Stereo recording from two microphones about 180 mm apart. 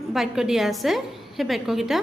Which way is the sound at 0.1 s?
Centre (ahead or behind).